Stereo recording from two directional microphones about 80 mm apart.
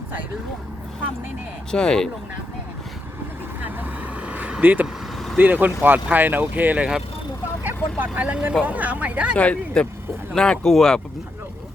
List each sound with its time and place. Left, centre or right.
1.7 s speech: centre
4.3 s a sound: centre
5.4 s speech: right
9.3 s speech: centre